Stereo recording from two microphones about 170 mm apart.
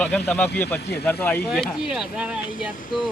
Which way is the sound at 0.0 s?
10° left (ahead or behind).